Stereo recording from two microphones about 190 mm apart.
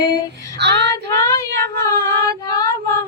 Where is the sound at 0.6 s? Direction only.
60° right (ahead or behind).